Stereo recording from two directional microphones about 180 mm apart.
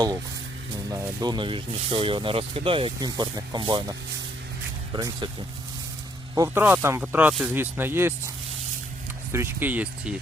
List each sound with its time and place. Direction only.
0.9 s speech: 20° right (ahead or behind)
4.9 s speech: 20° right (ahead or behind)
6.3 s speech: 15° right (ahead or behind)
9.3 s speech: 15° right (ahead or behind)